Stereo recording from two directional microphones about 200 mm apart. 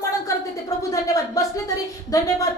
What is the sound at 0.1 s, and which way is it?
A woman's voice, 15° left (ahead or behind).